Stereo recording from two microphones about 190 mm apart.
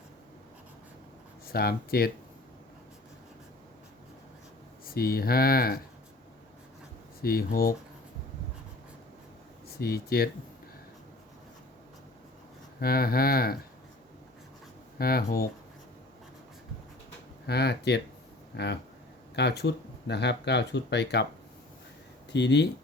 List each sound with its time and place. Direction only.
1.5 s speech: 55° left (ahead or behind)
4.9 s speech: 50° left (ahead or behind)
7.2 s speech: 50° left (ahead or behind)
9.6 s speech: 55° left (ahead or behind)
12.8 s speech: 50° left (ahead or behind)
14.9 s speech: 55° left (ahead or behind)
17.4 s speech: 60° left (ahead or behind)
22.3 s speech: 65° left (ahead or behind)